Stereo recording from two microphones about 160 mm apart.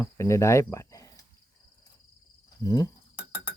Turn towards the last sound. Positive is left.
turn(degrees=-15)  # may be behind; listen again after turning